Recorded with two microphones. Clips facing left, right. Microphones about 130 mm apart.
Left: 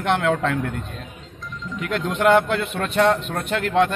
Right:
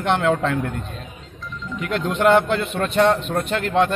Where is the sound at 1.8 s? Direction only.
5° left (ahead or behind).